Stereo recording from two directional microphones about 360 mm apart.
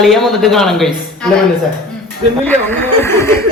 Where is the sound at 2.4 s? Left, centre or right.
Centre.